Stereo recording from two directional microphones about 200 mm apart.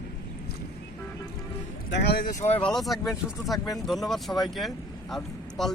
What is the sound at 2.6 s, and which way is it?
Speech, centre (ahead or behind).